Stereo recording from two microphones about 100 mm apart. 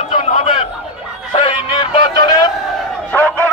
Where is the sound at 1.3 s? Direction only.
70° left (ahead or behind).